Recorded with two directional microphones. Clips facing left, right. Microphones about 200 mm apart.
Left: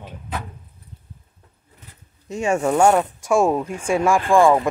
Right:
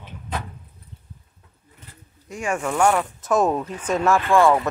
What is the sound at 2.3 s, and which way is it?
Speech, 25° left (ahead or behind).